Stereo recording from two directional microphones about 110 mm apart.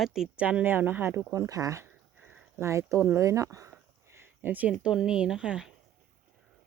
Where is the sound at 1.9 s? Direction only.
15° right (ahead or behind).